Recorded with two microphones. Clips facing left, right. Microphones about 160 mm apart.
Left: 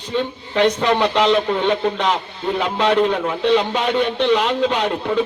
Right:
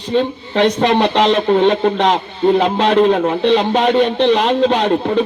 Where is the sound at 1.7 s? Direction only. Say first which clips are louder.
Right 5 dB; 60° right (ahead or behind).